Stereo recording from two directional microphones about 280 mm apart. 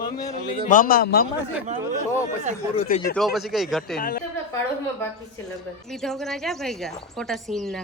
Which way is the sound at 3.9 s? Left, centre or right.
Left.